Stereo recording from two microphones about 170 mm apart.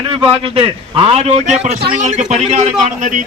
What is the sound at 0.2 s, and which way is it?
A man's voice, 30° right (ahead or behind).